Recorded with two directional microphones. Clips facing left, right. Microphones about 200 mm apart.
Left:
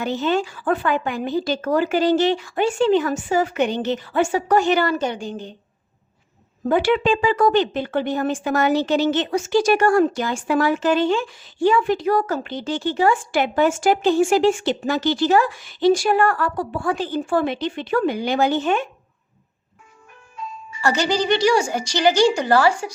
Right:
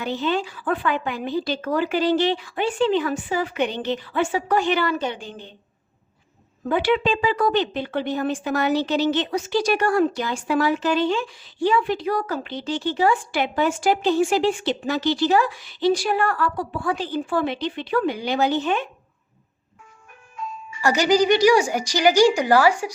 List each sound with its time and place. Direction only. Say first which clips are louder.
0.0 s a woman's voice: left 3 dB; 45° left (ahead or behind)
6.7 s a woman's voice: left 3 dB; 45° left (ahead or behind)
20.8 s a woman's voice: right 2 dB; 15° right (ahead or behind)